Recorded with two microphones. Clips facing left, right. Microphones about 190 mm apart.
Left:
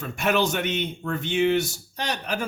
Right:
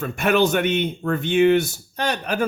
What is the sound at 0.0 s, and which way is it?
Speech, 55° right (ahead or behind).